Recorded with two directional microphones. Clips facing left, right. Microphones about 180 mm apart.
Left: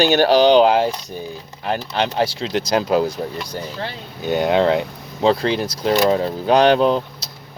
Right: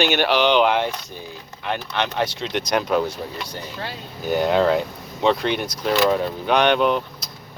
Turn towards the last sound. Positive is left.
turn(degrees=35)  # may be behind; listen again after turning